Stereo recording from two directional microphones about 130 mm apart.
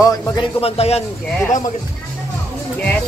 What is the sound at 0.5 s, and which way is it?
Speech, 50° left (ahead or behind).